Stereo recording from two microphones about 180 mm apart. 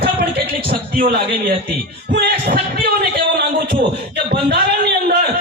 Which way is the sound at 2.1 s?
60° right (ahead or behind).